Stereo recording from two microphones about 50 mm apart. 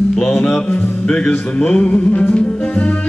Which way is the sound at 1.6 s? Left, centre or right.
Centre.